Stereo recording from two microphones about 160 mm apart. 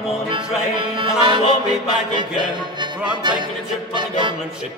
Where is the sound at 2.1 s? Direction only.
30° right (ahead or behind).